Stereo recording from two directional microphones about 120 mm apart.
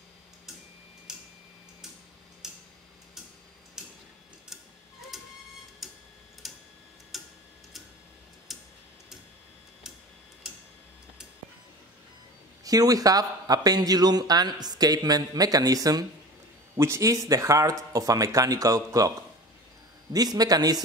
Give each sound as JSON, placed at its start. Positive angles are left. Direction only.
{"t": 1.1, "sound": "tick-tock", "side_deg": -5}
{"t": 2.4, "sound": "tick-tock", "side_deg": -5}
{"t": 3.8, "sound": "tick-tock", "side_deg": -5}
{"t": 5.1, "sound": "printer", "side_deg": 0}
{"t": 5.8, "sound": "tick-tock", "side_deg": 0}
{"t": 8.5, "sound": "tick-tock", "side_deg": 0}
{"t": 12.6, "sound": "speech", "side_deg": -30}